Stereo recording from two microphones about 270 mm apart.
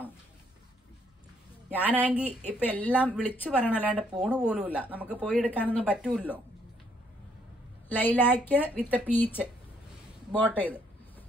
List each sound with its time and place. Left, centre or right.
1.7 s a woman's voice: centre
2.6 s speech: centre
3.8 s a woman's voice: centre
5.1 s a woman's voice: centre
7.9 s speech: centre